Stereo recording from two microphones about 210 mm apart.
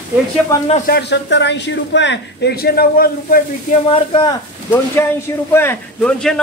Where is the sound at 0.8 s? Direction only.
50° left (ahead or behind).